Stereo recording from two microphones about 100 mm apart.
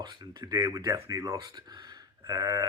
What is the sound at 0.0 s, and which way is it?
Speech, 45° right (ahead or behind).